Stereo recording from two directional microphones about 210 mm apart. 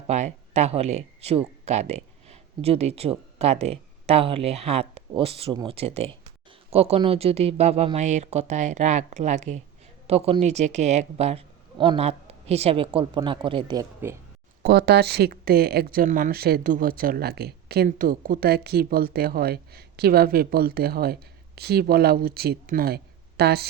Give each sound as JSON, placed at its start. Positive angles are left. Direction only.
{"t": 0.1, "sound": "speech", "side_deg": -35}
{"t": 14.6, "sound": "speech", "side_deg": -50}